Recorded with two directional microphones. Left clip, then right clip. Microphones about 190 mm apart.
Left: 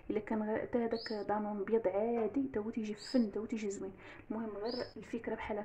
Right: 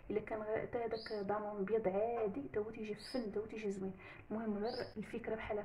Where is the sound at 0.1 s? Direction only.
30° left (ahead or behind).